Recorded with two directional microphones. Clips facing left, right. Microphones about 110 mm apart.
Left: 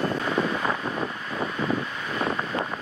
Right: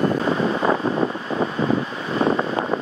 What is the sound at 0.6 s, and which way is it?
Vehicle, 30° right (ahead or behind).